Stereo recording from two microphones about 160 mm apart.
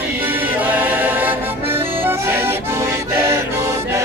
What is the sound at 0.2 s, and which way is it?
Music, 10° right (ahead or behind).